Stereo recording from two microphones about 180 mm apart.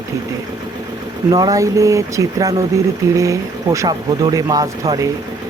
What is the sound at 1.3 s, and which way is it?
Speech, 20° right (ahead or behind).